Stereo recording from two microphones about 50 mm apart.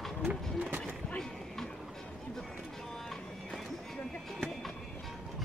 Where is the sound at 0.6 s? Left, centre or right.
Right.